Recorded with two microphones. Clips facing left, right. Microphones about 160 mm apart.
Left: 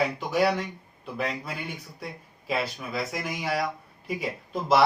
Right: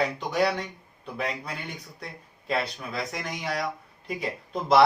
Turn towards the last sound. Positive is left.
turn(degrees=0)  # may be behind; listen again after turning